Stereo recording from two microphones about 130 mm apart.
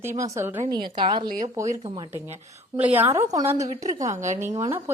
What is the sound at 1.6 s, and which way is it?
Speech, 20° right (ahead or behind).